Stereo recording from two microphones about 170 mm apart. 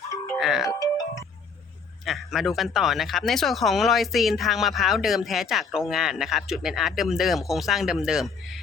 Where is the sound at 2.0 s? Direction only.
Centre (ahead or behind).